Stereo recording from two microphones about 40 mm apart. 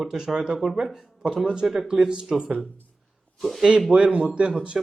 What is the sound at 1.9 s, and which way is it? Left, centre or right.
Mantra, centre.